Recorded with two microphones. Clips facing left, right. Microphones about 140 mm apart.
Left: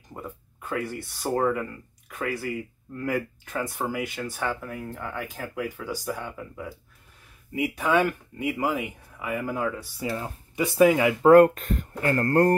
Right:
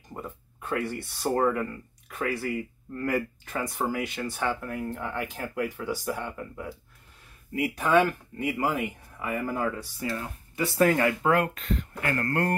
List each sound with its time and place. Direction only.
0.1 s speech: centre (ahead or behind)
9.9 s speech: 20° left (ahead or behind)
11.2 s speech: 45° left (ahead or behind)
12.0 s speech: 35° left (ahead or behind)